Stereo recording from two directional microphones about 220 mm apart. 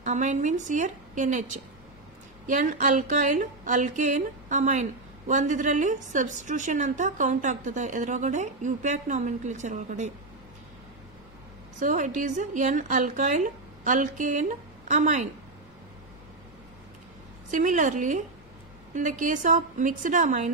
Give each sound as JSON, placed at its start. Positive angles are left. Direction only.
{"t": 0.0, "sound": "a woman's voice", "side_deg": -35}
{"t": 11.8, "sound": "a woman's voice", "side_deg": -35}
{"t": 17.5, "sound": "a woman's voice", "side_deg": -35}